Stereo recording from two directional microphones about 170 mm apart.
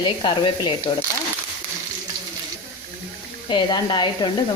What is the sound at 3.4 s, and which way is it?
Speech, 25° left (ahead or behind).